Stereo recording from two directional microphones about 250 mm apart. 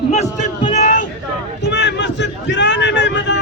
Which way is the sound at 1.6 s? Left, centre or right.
Left.